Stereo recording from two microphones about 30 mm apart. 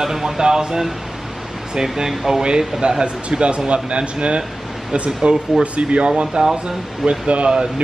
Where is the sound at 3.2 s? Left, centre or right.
Right.